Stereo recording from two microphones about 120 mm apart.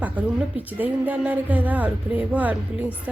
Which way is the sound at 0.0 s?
15° right (ahead or behind).